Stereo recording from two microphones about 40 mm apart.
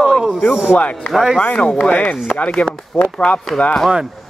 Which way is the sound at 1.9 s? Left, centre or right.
Left.